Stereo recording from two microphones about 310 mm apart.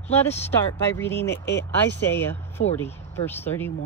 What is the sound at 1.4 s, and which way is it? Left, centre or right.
Speech, left.